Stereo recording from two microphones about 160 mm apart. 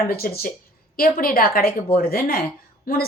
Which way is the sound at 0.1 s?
65° left (ahead or behind).